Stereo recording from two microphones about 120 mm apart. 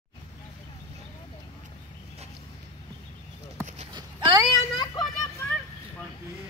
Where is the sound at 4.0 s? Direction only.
35° right (ahead or behind).